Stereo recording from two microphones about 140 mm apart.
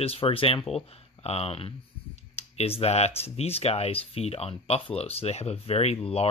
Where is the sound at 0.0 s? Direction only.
45° left (ahead or behind).